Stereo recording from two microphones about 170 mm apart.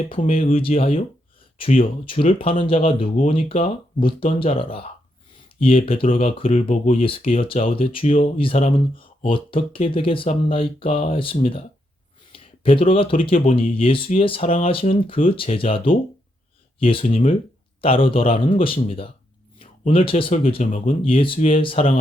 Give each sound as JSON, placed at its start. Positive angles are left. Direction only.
{"t": 0.3, "sound": "speech", "side_deg": 35}